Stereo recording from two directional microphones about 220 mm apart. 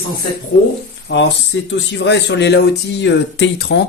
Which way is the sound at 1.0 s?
55° left (ahead or behind).